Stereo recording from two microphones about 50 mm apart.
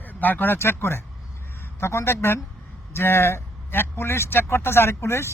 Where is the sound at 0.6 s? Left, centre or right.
Left.